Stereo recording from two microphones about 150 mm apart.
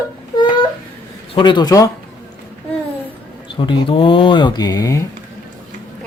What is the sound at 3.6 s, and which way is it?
Speech, 30° left (ahead or behind).